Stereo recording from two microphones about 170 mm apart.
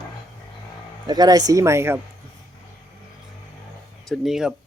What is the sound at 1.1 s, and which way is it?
Speech, 25° right (ahead or behind).